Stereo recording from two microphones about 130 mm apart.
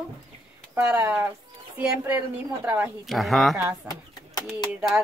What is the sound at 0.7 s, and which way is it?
Speech, 15° right (ahead or behind).